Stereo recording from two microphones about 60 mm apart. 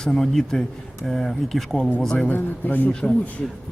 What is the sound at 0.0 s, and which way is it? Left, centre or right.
A man's voice, centre.